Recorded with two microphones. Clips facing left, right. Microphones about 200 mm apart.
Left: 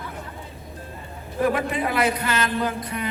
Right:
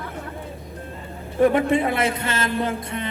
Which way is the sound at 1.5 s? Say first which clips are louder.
Right 5 dB; 25° right (ahead or behind).